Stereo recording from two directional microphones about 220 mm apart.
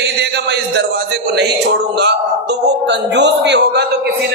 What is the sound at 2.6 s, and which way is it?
A man's voice, 55° right (ahead or behind).